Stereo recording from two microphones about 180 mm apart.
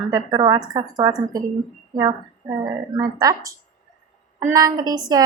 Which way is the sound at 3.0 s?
20° right (ahead or behind).